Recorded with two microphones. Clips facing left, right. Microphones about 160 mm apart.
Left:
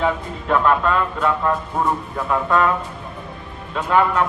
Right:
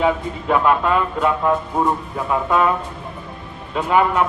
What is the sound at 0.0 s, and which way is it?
A man's voice, 10° right (ahead or behind).